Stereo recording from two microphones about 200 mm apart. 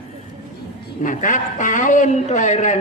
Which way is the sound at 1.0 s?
40° left (ahead or behind).